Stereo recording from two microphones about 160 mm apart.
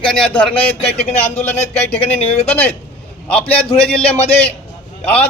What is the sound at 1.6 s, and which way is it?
Speech, 40° left (ahead or behind).